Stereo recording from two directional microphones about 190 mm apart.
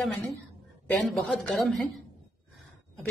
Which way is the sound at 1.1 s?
Centre (ahead or behind).